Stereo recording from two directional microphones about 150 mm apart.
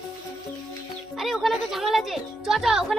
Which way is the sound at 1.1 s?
Centre (ahead or behind).